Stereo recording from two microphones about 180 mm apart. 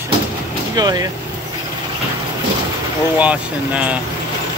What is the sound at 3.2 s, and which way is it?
Speech, 5° right (ahead or behind).